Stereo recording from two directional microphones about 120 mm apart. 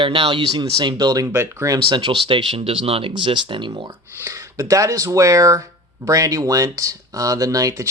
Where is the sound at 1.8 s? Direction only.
40° right (ahead or behind).